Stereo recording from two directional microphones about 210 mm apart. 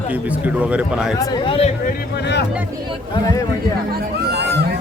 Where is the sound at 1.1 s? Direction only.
20° left (ahead or behind).